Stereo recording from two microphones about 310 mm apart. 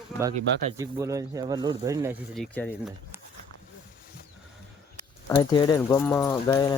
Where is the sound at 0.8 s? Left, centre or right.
Centre.